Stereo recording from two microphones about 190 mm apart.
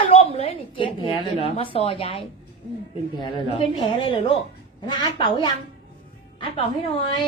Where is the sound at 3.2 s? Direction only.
25° left (ahead or behind).